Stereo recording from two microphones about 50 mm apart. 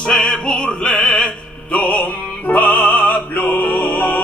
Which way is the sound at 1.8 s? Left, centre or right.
Left.